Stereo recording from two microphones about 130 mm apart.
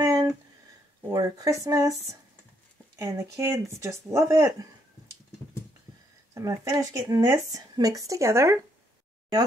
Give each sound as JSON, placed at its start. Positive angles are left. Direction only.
{"t": 0.0, "sound": "a sound", "side_deg": -25}
{"t": 1.1, "sound": "speech", "side_deg": -30}
{"t": 6.3, "sound": "speech", "side_deg": -25}